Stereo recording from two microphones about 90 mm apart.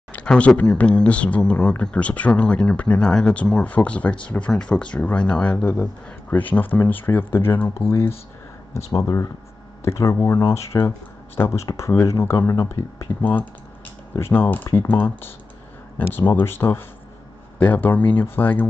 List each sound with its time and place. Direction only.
0.1 s speech: 15° left (ahead or behind)
8.9 s speech: 40° left (ahead or behind); by 18.7 s 20° left (ahead or behind)